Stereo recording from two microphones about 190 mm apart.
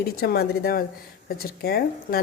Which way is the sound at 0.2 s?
55° left (ahead or behind).